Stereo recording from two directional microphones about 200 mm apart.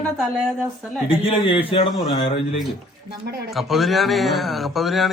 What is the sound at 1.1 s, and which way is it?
Speech, 25° left (ahead or behind).